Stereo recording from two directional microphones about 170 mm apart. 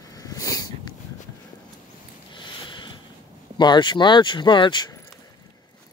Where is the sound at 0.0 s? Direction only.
20° left (ahead or behind).